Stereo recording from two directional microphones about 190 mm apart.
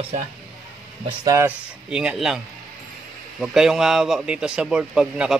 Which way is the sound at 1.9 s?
5° right (ahead or behind).